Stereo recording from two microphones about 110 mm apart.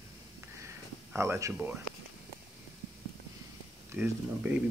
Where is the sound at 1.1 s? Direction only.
25° right (ahead or behind).